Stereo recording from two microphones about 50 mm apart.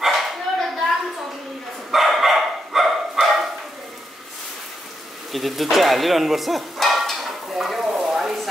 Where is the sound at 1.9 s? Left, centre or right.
Centre.